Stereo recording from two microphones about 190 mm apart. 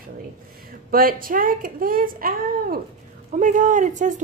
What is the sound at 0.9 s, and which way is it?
A woman's voice, 50° right (ahead or behind).